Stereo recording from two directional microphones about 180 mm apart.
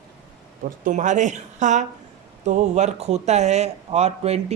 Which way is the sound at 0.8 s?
45° right (ahead or behind).